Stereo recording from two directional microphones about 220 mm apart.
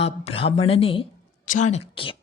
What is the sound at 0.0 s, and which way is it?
Speech, 25° left (ahead or behind).